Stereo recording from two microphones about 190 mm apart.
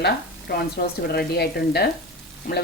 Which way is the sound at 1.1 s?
55° left (ahead or behind).